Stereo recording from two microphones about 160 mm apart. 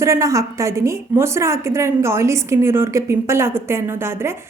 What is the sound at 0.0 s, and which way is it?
A woman's voice, 20° right (ahead or behind).